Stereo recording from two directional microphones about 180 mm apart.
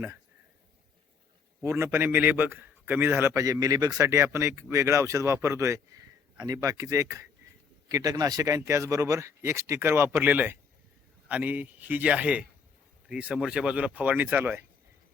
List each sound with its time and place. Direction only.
1.6 s a man's voice: 15° right (ahead or behind)